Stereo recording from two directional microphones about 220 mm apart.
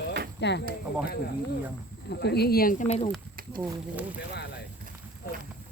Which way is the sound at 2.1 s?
50° left (ahead or behind).